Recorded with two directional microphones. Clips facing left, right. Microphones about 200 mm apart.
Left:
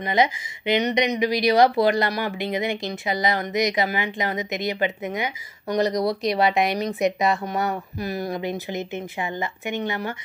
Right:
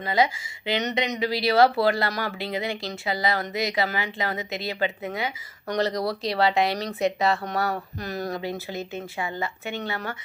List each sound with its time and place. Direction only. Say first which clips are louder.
0.0 s speech: left 2 dB; 20° left (ahead or behind)